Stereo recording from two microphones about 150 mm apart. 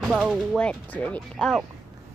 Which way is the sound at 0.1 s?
5° right (ahead or behind).